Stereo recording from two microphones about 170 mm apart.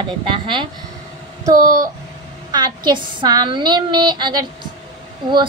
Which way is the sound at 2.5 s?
25° right (ahead or behind).